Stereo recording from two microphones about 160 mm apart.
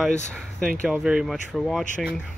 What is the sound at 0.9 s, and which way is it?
Speech, 5° right (ahead or behind).